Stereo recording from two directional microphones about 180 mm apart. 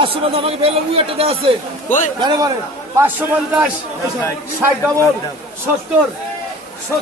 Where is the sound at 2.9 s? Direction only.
10° right (ahead or behind).